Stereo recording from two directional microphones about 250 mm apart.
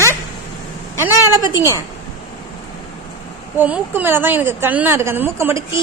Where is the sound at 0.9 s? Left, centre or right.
Centre.